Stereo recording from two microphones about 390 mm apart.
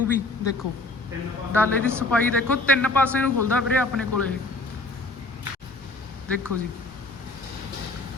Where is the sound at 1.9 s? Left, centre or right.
Centre.